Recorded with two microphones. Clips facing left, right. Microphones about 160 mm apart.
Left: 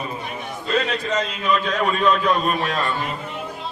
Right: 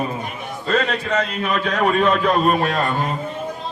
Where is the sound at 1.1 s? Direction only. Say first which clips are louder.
Even; 50° right (ahead or behind).